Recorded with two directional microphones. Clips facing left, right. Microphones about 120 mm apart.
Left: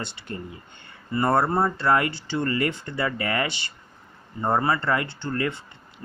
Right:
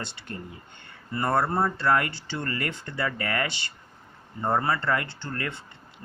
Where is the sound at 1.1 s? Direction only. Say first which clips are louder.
Left 3 dB; 20° left (ahead or behind).